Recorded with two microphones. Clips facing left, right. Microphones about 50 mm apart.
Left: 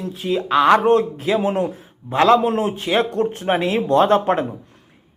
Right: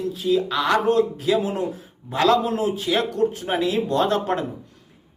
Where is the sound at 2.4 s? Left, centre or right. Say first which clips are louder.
Left 3 dB; left.